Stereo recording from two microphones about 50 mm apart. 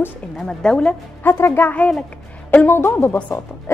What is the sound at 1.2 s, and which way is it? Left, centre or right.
Speech, left.